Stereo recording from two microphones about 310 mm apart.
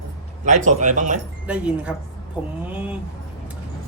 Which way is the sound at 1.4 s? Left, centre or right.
Centre.